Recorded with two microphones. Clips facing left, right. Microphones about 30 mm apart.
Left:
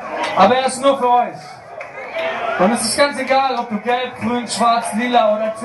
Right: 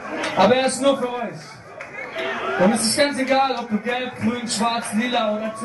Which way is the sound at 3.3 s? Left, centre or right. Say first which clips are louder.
Left 3 dB; left.